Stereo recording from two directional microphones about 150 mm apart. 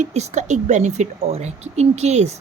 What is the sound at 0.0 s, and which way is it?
Speech, 50° right (ahead or behind).